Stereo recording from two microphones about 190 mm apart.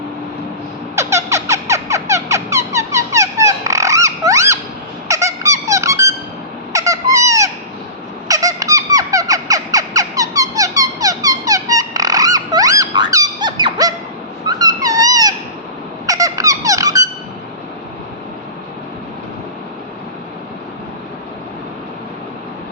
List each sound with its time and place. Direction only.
0.9 s squeak: 15° right (ahead or behind)
14.4 s a sound: 20° right (ahead or behind)
16.0 s squeak: 20° right (ahead or behind)